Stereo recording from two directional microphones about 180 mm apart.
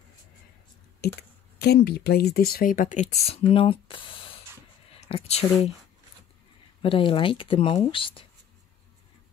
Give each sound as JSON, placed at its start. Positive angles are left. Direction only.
{"t": 1.6, "sound": "speech", "side_deg": 65}
{"t": 5.0, "sound": "speech", "side_deg": 35}
{"t": 6.8, "sound": "speech", "side_deg": 30}